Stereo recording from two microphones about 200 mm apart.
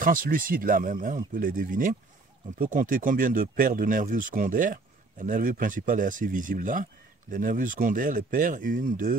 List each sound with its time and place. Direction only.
0.0 s speech: 45° right (ahead or behind)